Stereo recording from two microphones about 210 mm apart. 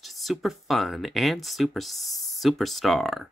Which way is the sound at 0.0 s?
Centre (ahead or behind).